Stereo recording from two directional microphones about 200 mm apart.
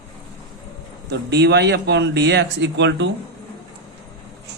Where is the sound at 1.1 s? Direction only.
55° right (ahead or behind).